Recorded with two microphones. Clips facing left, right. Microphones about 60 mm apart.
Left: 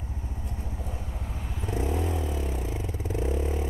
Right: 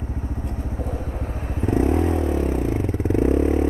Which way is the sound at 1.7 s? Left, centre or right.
Right.